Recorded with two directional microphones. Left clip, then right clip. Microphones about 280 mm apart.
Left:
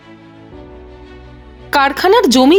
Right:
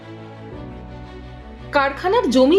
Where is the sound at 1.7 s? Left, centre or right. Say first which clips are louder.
Left 7 dB; left.